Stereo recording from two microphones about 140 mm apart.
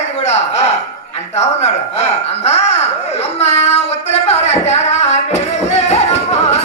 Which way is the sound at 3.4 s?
50° left (ahead or behind).